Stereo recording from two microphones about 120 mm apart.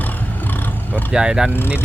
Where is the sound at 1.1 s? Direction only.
5° right (ahead or behind).